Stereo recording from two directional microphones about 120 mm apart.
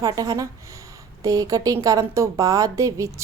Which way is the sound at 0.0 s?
30° right (ahead or behind).